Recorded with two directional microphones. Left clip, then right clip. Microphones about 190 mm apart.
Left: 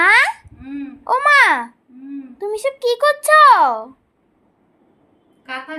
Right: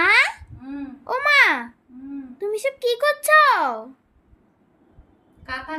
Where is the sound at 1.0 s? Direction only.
10° right (ahead or behind).